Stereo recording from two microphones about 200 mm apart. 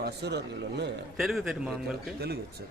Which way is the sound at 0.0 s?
55° right (ahead or behind).